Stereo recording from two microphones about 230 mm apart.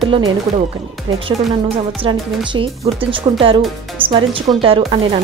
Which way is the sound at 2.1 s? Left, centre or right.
Right.